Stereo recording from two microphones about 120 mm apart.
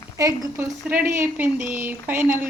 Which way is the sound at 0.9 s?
15° right (ahead or behind).